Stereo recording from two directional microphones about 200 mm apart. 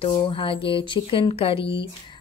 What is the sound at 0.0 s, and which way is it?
A woman's voice, 25° left (ahead or behind).